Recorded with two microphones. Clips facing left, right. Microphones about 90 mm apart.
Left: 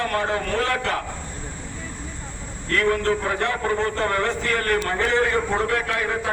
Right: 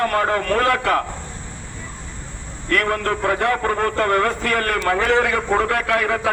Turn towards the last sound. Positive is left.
turn(degrees=-75)  # may be behind; listen again after turning